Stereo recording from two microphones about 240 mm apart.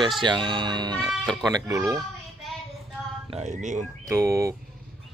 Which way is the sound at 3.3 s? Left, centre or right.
Right.